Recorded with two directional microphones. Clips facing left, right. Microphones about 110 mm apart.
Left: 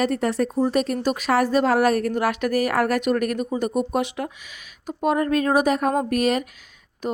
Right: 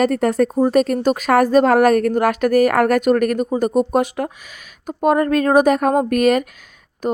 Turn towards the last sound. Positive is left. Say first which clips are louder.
# right 6 dB
turn(degrees=-45)  # may be behind; listen again after turning